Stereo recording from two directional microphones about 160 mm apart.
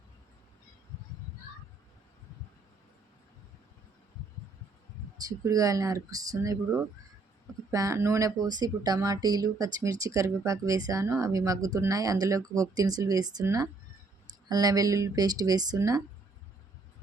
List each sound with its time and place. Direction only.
5.1 s speech: 20° right (ahead or behind)
7.7 s speech: 20° right (ahead or behind)